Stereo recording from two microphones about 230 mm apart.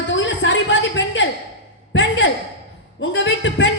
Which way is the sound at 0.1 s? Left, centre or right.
Left.